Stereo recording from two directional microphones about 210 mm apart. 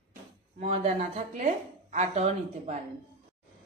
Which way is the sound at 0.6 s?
30° right (ahead or behind).